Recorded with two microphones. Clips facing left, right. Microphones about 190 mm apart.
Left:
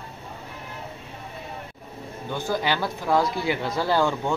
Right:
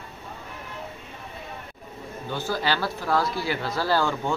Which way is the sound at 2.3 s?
15° left (ahead or behind).